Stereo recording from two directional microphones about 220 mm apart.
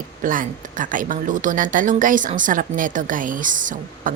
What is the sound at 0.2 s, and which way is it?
Speech, 40° right (ahead or behind).